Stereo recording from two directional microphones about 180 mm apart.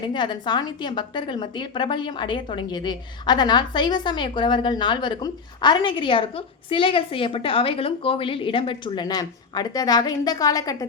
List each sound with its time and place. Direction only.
0.0 s a woman's voice: 25° left (ahead or behind)